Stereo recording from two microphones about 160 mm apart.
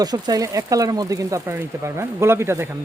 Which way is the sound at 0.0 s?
25° right (ahead or behind).